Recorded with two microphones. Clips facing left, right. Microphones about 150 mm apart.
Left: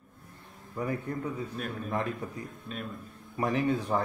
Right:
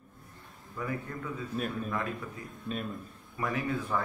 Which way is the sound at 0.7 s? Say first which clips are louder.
Left 4 dB; 35° left (ahead or behind).